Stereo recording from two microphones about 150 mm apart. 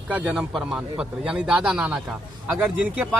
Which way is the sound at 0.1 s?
10° right (ahead or behind).